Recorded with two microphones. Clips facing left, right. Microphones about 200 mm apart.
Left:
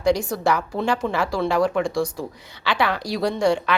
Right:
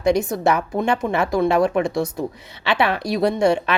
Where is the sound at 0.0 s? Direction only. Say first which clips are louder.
Right 2 dB; 20° right (ahead or behind).